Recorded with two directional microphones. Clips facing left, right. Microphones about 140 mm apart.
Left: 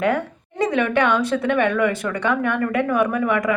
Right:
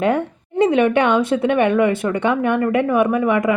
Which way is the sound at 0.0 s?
25° right (ahead or behind).